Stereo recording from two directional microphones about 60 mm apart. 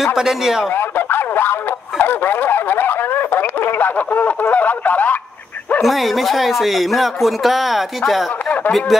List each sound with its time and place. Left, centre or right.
0.0 s a man's voice: centre
0.7 s a sound: left
5.8 s speech: centre